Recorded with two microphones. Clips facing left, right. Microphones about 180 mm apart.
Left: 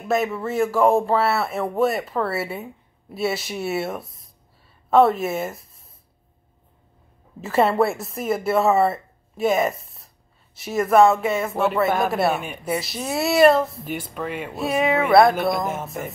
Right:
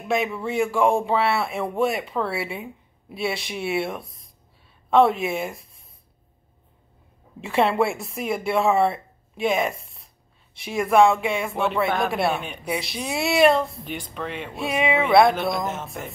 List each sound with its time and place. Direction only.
0.1 s speech: centre (ahead or behind)
4.0 s a sound: 25° left (ahead or behind)
4.8 s speech: centre (ahead or behind)
7.4 s speech: centre (ahead or behind)